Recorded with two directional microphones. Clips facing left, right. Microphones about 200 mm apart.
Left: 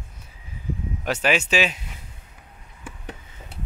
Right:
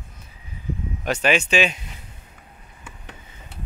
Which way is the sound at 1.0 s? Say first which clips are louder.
Right 2 dB; 5° left (ahead or behind).